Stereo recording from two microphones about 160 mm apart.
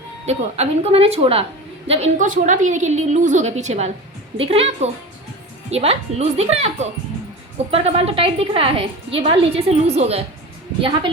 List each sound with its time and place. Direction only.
0.3 s a woman's voice: 40° right (ahead or behind)
2.1 s a woman's voice: 55° right (ahead or behind); by 11.1 s 30° right (ahead or behind)